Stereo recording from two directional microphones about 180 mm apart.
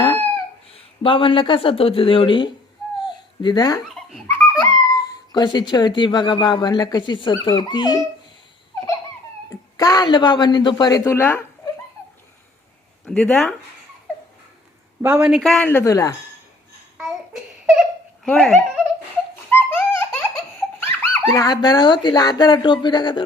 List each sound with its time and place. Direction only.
0.0 s chicken: 30° left (ahead or behind)
0.7 s speech: 30° left (ahead or behind)
3.0 s babbling: 25° left (ahead or behind)
3.8 s a sound: centre (ahead or behind)
4.3 s speech: 15° left (ahead or behind)
9.5 s speech: 20° left (ahead or behind)
13.1 s a man's voice: 5° left (ahead or behind)
15.0 s a man's voice: 5° right (ahead or behind); by 16.1 s 20° left (ahead or behind)
17.0 s a sound: centre (ahead or behind)
18.3 s a man's voice: 5° left (ahead or behind)
19.5 s baby laughter: 15° left (ahead or behind)
20.7 s speech: 15° left (ahead or behind)